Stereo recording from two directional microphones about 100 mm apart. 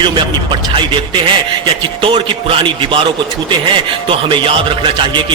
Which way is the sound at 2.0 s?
60° right (ahead or behind).